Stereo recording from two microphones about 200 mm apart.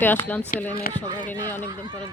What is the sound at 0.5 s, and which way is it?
Speech, 40° left (ahead or behind).